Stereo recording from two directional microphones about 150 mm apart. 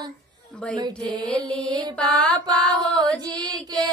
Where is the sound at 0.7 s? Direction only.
30° right (ahead or behind).